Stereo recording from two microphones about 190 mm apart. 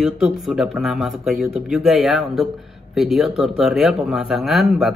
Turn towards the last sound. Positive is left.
turn(degrees=0)  # may be behind; listen again after turning